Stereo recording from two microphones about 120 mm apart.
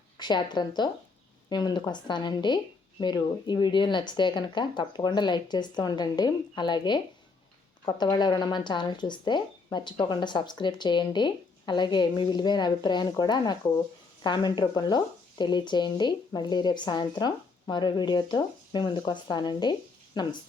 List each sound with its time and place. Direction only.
0.2 s speech: 35° left (ahead or behind)